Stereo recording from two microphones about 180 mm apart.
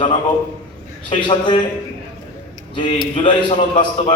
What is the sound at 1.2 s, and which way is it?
Speech, 25° left (ahead or behind).